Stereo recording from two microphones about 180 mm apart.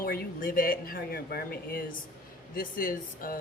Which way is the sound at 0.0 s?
55° left (ahead or behind).